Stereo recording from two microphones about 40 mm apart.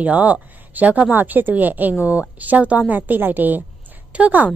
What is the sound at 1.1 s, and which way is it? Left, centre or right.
A woman's voice, right.